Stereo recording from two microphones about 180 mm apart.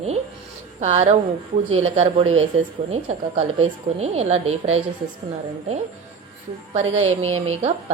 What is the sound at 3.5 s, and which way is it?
A woman's voice, 35° right (ahead or behind).